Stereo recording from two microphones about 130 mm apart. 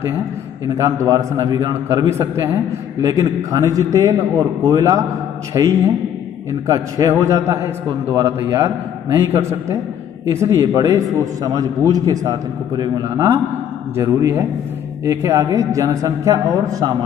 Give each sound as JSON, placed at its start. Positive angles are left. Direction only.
{"t": 0.7, "sound": "a man's voice", "side_deg": -25}
{"t": 13.9, "sound": "a man's voice", "side_deg": -20}